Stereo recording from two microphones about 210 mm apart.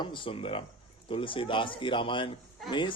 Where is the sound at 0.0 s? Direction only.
25° left (ahead or behind).